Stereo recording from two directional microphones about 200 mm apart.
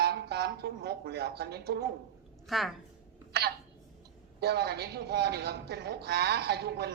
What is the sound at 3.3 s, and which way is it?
Speech, 50° right (ahead or behind).